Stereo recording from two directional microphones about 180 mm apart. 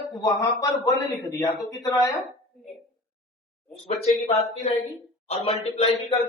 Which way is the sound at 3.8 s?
35° left (ahead or behind).